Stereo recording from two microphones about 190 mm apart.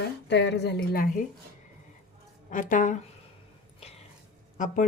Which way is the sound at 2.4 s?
45° left (ahead or behind).